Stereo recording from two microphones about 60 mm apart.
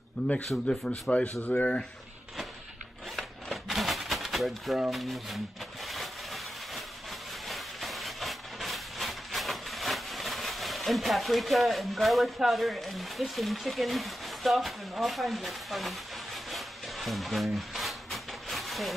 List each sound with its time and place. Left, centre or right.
0.7 s speech: centre
1.4 s speech: left
3.2 s a sound: centre
4.9 s speech: centre
5.9 s vehicle: centre
16.4 s a sound: centre